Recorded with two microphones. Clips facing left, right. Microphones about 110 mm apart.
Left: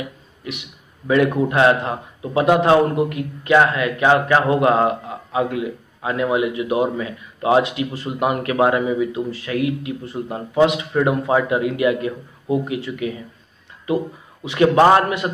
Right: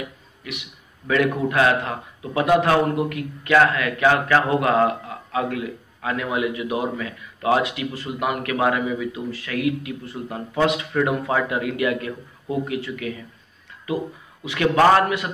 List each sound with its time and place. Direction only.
0.5 s a man's voice: 25° left (ahead or behind)
14.4 s a man's voice: 25° left (ahead or behind)